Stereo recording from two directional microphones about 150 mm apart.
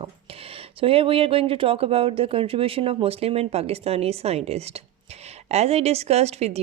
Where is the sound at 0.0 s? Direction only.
40° right (ahead or behind).